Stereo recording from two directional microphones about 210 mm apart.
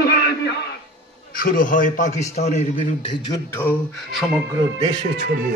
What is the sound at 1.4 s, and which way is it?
A man's voice, 40° left (ahead or behind).